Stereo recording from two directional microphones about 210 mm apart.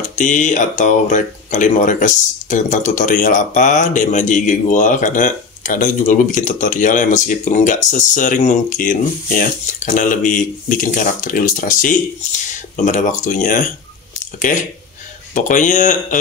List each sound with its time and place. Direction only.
0.0 s speech: 35° left (ahead or behind)